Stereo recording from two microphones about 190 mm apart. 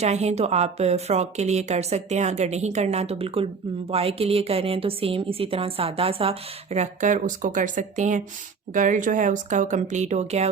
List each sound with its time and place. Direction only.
0.0 s a woman's voice: 35° right (ahead or behind)